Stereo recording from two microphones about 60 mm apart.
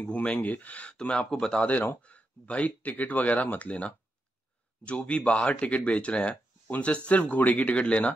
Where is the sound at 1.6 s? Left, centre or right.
Left.